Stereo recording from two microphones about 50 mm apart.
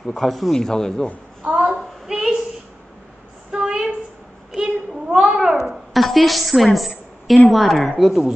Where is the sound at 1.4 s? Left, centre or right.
Centre.